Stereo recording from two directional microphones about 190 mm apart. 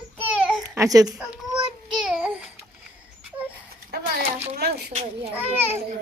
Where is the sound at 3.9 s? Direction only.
55° right (ahead or behind).